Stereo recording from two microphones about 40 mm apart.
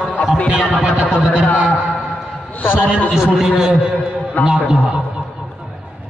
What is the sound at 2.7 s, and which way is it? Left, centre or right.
Speech, right.